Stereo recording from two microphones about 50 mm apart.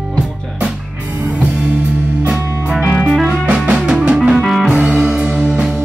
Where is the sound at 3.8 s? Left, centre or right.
Right.